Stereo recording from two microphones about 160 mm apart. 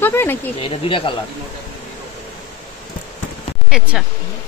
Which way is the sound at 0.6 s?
35° left (ahead or behind).